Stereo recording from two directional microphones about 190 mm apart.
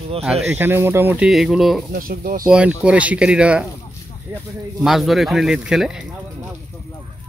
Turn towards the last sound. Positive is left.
turn(degrees=-5)  # may be behind; listen again after turning